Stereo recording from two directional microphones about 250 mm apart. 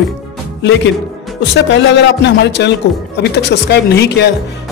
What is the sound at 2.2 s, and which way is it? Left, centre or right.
Speech, left.